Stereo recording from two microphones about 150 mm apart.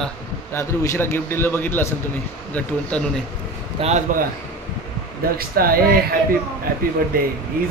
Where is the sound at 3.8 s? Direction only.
50° right (ahead or behind).